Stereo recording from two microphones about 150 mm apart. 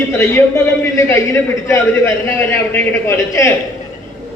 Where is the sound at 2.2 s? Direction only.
15° left (ahead or behind).